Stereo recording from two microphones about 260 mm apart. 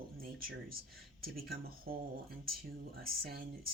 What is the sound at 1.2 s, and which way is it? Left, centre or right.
Speech, right.